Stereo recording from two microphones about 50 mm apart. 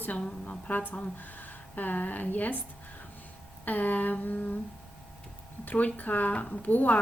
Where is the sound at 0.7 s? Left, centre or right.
Left.